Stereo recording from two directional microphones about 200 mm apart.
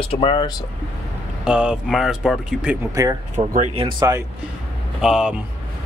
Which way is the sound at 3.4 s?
30° right (ahead or behind).